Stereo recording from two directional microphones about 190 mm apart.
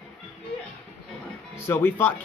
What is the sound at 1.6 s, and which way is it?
Speech, 10° left (ahead or behind).